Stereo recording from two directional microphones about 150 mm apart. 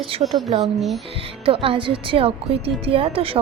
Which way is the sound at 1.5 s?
35° right (ahead or behind).